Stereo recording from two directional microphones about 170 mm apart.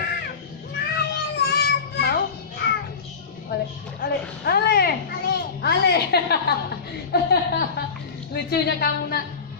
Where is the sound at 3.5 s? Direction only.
70° left (ahead or behind).